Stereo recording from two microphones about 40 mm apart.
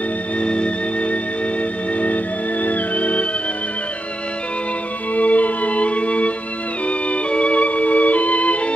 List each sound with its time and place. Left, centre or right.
0.4 s music: left
2.0 s music: left
5.1 s music: left